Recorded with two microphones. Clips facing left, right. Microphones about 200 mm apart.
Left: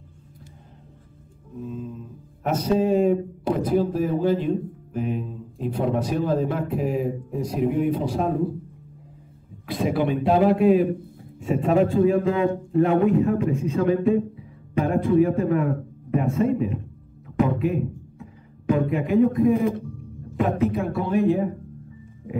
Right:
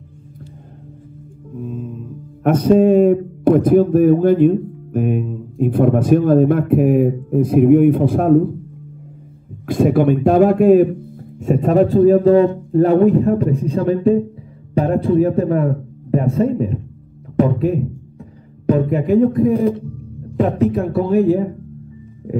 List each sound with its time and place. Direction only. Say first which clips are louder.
1.6 s music: right 5 dB; 50° right (ahead or behind)
2.4 s speech: right 9 dB; 50° right (ahead or behind)
9.7 s a man's voice: right 9 dB; 50° right (ahead or behind)
20.9 s a man's voice: right 8 dB; 35° right (ahead or behind)